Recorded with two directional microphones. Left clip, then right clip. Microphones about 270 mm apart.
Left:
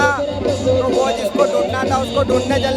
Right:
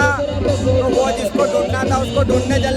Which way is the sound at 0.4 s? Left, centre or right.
Left.